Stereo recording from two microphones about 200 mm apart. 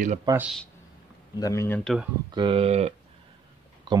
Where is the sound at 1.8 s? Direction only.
Centre (ahead or behind).